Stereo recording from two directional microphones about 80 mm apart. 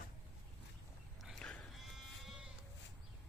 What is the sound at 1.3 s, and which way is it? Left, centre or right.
Sheep, centre.